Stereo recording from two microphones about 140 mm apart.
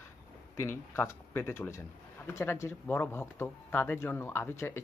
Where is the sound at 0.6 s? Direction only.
15° left (ahead or behind).